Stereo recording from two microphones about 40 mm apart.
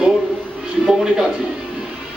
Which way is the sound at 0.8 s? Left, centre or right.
Centre.